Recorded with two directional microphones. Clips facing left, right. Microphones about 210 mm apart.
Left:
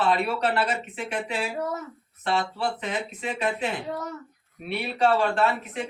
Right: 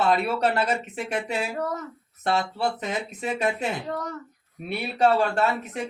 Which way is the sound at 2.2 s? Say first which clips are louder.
Right 1 dB; 40° right (ahead or behind).